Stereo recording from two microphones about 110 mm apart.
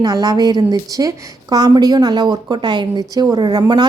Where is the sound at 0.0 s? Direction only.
35° right (ahead or behind).